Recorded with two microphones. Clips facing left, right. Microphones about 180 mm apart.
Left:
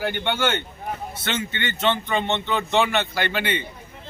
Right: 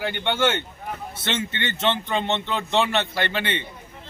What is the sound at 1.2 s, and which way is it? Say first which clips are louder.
Speech: right 1 dB; 30° right (ahead or behind).